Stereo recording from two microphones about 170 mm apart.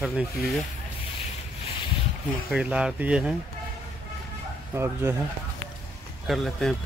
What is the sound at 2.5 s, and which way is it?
Speech, 5° right (ahead or behind).